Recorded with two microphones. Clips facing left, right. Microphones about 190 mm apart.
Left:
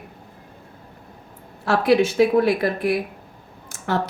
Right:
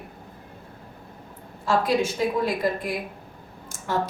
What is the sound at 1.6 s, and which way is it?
Speech, 70° left (ahead or behind).